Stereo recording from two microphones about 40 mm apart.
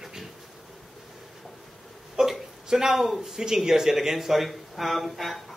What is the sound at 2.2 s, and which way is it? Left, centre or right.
Hiccup, centre.